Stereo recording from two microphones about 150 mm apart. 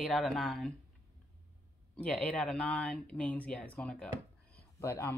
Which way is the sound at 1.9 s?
5° left (ahead or behind).